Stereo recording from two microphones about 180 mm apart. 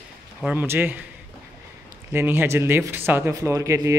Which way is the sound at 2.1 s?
10° right (ahead or behind).